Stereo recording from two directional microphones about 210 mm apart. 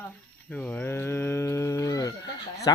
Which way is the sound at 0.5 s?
5° left (ahead or behind).